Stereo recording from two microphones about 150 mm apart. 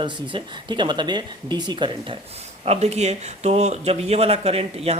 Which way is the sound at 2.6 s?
45° right (ahead or behind).